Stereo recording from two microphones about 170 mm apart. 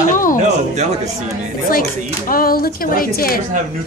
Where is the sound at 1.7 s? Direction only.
55° left (ahead or behind).